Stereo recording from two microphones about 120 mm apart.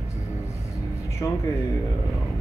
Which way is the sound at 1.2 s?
30° left (ahead or behind).